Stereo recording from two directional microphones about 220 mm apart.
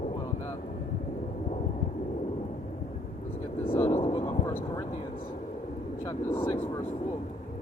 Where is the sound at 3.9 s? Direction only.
25° left (ahead or behind).